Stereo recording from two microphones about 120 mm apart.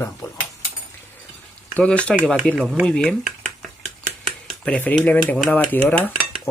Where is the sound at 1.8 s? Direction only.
10° left (ahead or behind).